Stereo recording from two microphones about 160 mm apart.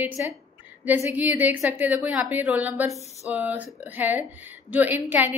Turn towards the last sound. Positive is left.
turn(degrees=-10)  # may be behind; listen again after turning